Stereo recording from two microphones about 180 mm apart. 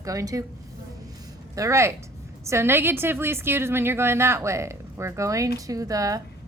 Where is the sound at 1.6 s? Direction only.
15° right (ahead or behind).